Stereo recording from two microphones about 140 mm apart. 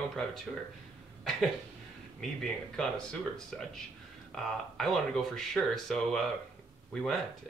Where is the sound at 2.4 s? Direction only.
5° left (ahead or behind).